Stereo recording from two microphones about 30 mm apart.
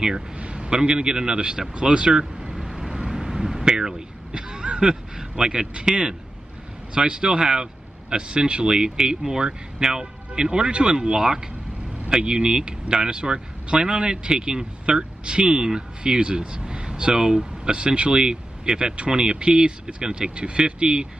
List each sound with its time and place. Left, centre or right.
0.4 s a man's voice: right
2.6 s vehicle: centre; by 3.9 s right
4.3 s a sound: right
5.5 s speech: right
6.9 s speech: right
10.3 s speech: right
17.7 s speech: right
20.2 s speech: right